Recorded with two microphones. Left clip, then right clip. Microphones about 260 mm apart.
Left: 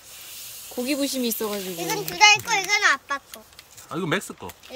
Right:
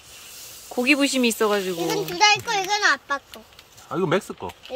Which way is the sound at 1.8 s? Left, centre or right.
Right.